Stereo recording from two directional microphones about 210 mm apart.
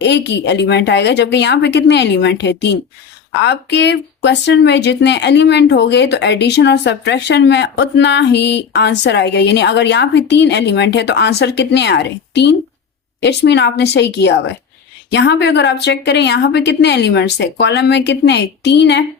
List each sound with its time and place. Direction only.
0.0 s speech: 55° left (ahead or behind)